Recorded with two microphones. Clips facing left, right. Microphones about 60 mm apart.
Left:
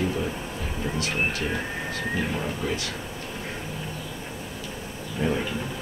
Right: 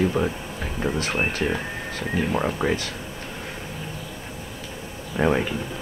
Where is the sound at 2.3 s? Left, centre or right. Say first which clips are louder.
Right 5 dB; right.